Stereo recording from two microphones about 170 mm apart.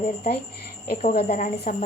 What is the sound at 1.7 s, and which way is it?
Speech, 45° left (ahead or behind).